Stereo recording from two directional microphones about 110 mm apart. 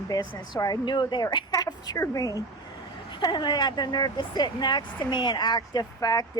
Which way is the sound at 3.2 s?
45° left (ahead or behind).